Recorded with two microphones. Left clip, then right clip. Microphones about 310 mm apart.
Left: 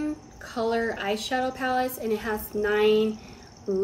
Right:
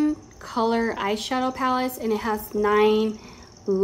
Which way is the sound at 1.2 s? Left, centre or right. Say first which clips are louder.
Right 2 dB; right.